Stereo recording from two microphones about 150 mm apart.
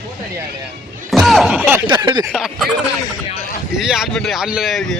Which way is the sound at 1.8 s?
25° right (ahead or behind).